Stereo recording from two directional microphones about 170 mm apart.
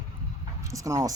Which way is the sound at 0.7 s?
20° right (ahead or behind).